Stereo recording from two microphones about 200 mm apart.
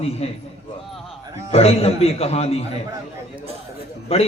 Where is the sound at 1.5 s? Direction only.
30° left (ahead or behind).